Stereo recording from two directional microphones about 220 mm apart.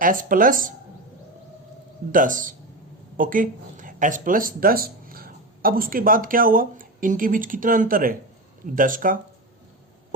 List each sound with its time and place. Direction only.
0.0 s speech: 40° right (ahead or behind)
2.1 s speech: 35° right (ahead or behind)